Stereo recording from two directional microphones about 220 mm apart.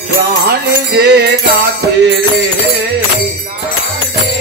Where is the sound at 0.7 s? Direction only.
50° right (ahead or behind).